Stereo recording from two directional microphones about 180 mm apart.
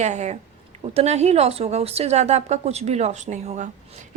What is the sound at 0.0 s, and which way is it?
A woman's voice, 40° right (ahead or behind).